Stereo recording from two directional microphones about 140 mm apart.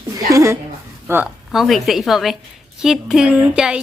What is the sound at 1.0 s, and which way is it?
Speech, 15° right (ahead or behind).